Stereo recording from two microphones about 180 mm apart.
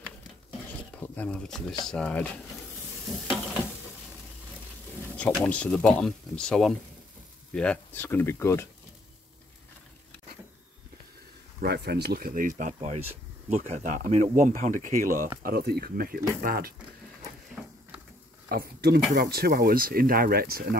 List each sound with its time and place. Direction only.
0.9 s speech: 10° left (ahead or behind)
5.1 s speech: 5° left (ahead or behind)
11.6 s speech: 65° right (ahead or behind); by 15.2 s 45° right (ahead or behind)
15.4 s speech: 60° right (ahead or behind)
18.5 s speech: 60° right (ahead or behind)